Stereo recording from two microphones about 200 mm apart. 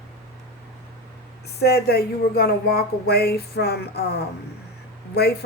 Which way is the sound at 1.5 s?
55° left (ahead or behind).